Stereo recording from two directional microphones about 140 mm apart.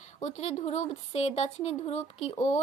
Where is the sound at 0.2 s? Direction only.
55° left (ahead or behind).